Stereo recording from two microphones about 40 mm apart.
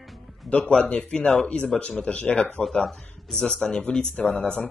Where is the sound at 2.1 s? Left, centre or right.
Left.